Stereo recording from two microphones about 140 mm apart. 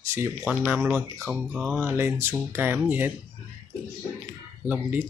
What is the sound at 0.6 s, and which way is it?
Speech, 15° right (ahead or behind).